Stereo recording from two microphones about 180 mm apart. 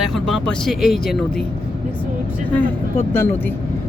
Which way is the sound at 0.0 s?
Centre (ahead or behind).